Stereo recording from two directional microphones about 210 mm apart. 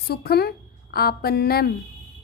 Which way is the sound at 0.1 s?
50° left (ahead or behind).